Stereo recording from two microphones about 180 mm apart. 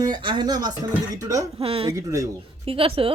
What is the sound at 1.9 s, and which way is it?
Speech, 15° right (ahead or behind).